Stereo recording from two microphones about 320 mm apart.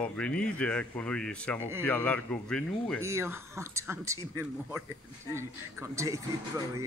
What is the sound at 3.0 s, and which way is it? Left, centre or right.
Speech, centre.